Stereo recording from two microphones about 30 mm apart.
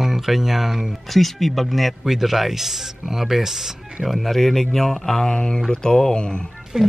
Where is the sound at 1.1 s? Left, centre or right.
Centre.